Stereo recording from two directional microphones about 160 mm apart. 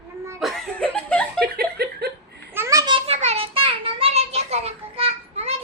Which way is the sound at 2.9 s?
40° right (ahead or behind).